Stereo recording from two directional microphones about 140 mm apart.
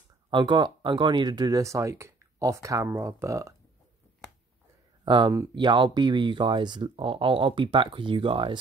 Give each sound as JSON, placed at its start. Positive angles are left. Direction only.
{"t": 0.3, "sound": "speech", "side_deg": -35}
{"t": 5.0, "sound": "speech", "side_deg": -30}